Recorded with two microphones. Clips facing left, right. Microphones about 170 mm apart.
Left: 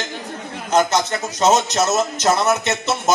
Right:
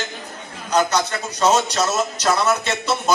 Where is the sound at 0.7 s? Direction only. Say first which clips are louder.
Left 2 dB; 25° left (ahead or behind).